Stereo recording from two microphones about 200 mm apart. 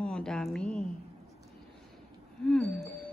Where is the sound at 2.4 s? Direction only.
5° left (ahead or behind).